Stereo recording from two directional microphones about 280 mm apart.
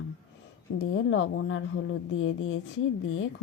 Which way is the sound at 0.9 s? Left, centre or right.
Left.